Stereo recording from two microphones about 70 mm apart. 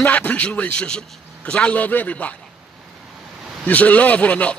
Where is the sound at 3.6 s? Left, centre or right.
Left.